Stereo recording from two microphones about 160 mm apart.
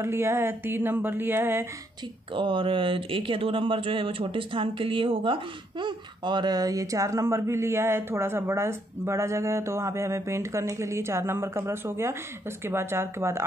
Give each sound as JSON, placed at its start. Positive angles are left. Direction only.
{"t": 0.0, "sound": "speech", "side_deg": -15}
{"t": 2.3, "sound": "speech", "side_deg": -30}